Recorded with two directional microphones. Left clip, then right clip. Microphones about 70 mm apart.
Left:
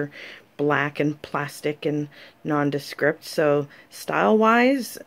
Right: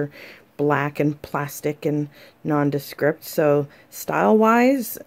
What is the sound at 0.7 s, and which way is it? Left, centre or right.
Speech, right.